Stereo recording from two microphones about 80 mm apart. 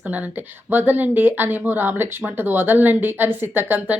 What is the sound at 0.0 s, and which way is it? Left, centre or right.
Speech, right.